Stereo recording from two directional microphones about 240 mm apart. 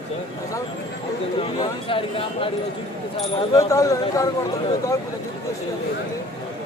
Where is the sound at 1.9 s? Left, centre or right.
Left.